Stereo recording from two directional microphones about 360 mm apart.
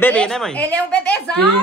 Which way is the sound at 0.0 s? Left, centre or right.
Centre.